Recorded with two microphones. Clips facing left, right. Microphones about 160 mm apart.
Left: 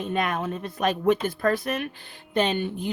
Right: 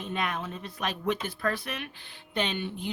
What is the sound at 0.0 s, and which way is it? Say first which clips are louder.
Speech: left 6 dB; 50° left (ahead or behind).